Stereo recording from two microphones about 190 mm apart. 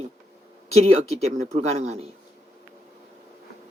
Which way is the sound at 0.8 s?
35° right (ahead or behind).